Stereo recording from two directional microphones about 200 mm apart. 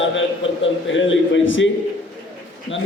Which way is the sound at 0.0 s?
70° left (ahead or behind).